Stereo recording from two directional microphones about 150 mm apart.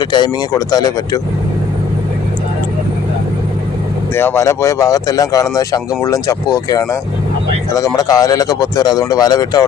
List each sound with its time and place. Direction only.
0.0 s speech: 30° left (ahead or behind)
4.1 s speech: 15° left (ahead or behind)